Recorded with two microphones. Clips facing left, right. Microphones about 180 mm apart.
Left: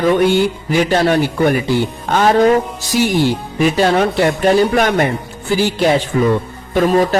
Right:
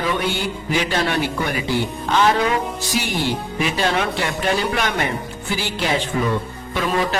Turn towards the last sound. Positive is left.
turn(degrees=45)  # may be behind; listen again after turning